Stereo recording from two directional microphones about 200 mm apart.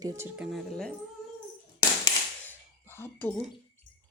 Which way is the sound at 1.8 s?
15° left (ahead or behind).